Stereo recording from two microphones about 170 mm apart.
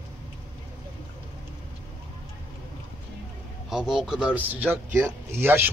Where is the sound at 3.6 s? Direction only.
5° right (ahead or behind).